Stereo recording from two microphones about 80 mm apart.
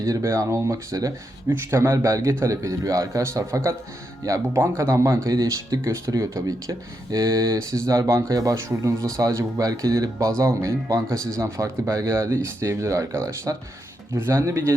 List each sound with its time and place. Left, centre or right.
0.0 s speech: right
5.3 s speech: right